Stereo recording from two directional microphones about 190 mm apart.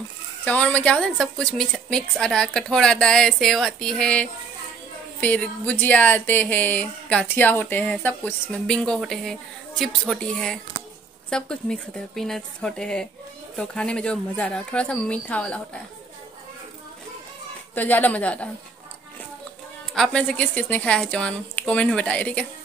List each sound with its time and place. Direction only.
0.5 s a woman's voice: 5° left (ahead or behind)
17.7 s speech: 10° left (ahead or behind)
19.9 s a woman's voice: 5° left (ahead or behind)